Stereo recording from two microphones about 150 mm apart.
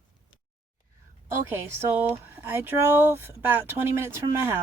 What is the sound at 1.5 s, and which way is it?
Speech, 15° right (ahead or behind).